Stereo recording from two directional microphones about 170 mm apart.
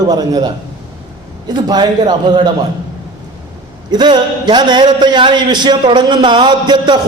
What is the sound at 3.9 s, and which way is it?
A man's voice, 25° right (ahead or behind).